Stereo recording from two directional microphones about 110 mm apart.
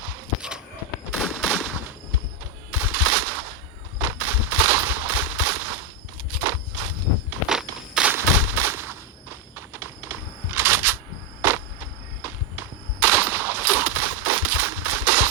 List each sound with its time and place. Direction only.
1.4 s gunshot: 15° right (ahead or behind)
2.7 s a sound: 15° right (ahead or behind)
6.3 s walk: 15° right (ahead or behind)
7.4 s walk: 5° right (ahead or behind)
8.1 s gunshot: 20° right (ahead or behind)